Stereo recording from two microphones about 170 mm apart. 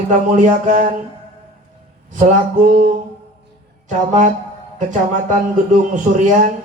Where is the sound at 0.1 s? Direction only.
50° right (ahead or behind).